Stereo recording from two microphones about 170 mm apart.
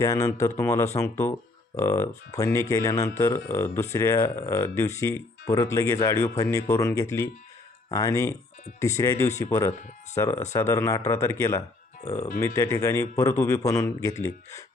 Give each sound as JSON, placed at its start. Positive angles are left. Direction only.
{"t": 0.0, "sound": "speech", "side_deg": 20}